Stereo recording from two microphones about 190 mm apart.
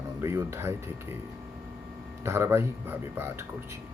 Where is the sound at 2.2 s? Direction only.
15° right (ahead or behind).